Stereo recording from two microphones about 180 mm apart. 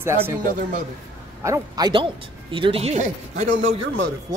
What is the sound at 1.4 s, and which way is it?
Speech, 20° right (ahead or behind).